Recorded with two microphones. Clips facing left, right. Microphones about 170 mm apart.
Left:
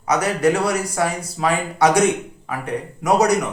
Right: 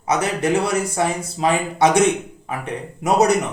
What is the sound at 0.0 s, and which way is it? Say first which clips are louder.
Speech: left 2 dB; 25° right (ahead or behind).